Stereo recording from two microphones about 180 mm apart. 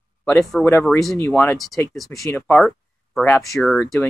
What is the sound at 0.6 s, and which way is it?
Speech, centre (ahead or behind).